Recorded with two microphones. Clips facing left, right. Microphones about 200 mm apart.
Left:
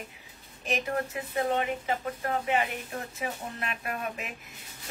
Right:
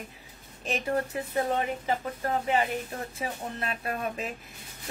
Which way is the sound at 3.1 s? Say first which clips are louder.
Right 2 dB; 35° right (ahead or behind).